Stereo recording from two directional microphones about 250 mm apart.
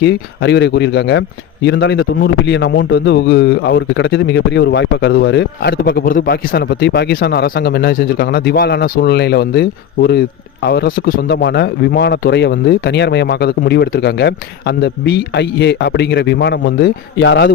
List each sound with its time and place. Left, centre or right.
0.0 s a man's voice: left